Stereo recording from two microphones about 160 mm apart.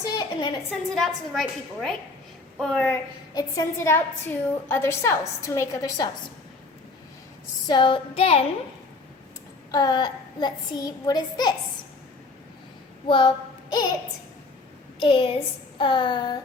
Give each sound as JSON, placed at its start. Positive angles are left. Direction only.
{"t": 0.0, "sound": "a woman's voice", "side_deg": 25}
{"t": 0.9, "sound": "a woman's voice", "side_deg": 0}
{"t": 3.3, "sound": "a woman's voice", "side_deg": 20}
{"t": 7.7, "sound": "speech", "side_deg": 30}
{"t": 9.7, "sound": "a child's voice", "side_deg": 25}
{"t": 13.1, "sound": "speech", "side_deg": 30}
{"t": 14.9, "sound": "a woman's voice", "side_deg": 35}